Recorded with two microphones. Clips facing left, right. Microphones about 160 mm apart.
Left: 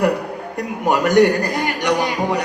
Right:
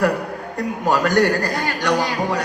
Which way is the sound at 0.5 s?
20° left (ahead or behind).